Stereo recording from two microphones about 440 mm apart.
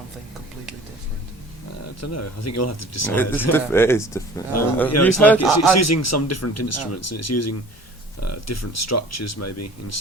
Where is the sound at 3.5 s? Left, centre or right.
Centre.